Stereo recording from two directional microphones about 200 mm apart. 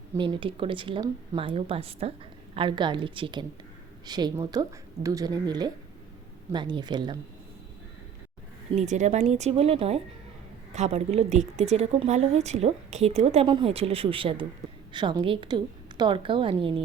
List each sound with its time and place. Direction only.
0.2 s speech: 25° right (ahead or behind)
8.7 s a woman's voice: 35° right (ahead or behind)